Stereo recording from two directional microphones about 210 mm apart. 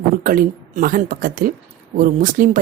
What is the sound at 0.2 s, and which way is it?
A woman's voice, 40° right (ahead or behind).